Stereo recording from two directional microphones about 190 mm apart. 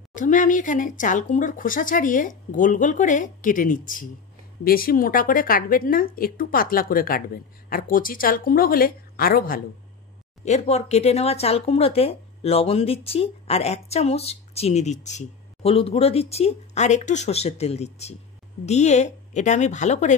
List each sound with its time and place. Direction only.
0.1 s speech: 45° left (ahead or behind)
10.4 s speech: 35° left (ahead or behind)